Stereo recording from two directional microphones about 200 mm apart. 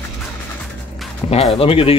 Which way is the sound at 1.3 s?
30° left (ahead or behind).